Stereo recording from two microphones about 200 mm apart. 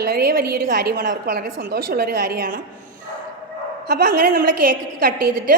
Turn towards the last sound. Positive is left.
turn(degrees=-50)  # may be behind; listen again after turning